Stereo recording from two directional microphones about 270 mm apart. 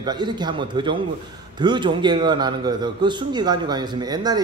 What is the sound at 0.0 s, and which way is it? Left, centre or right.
A man's voice, centre.